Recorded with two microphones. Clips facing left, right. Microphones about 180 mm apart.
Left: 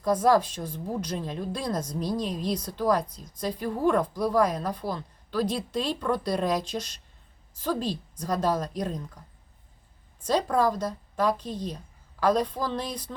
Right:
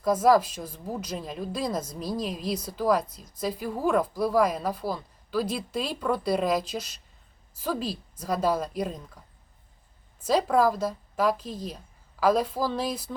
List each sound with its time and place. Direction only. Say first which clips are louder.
0.0 s a woman's voice: right 1 dB; 5° right (ahead or behind)
10.2 s a woman's voice: right 2 dB; 5° right (ahead or behind)